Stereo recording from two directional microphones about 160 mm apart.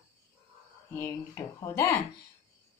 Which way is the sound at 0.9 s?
20° left (ahead or behind).